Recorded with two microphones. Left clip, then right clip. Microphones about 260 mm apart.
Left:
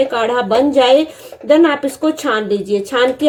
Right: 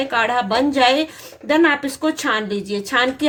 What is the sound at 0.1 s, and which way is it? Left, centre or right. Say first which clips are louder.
A woman's voice: left 3 dB; right.